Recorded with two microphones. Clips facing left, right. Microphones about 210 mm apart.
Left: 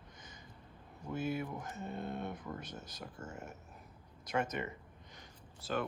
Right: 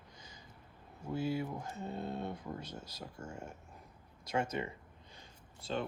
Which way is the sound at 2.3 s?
25° right (ahead or behind).